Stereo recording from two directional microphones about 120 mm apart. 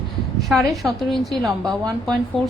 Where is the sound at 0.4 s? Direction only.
Centre (ahead or behind).